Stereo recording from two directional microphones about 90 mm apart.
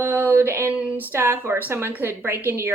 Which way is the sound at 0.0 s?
25° right (ahead or behind).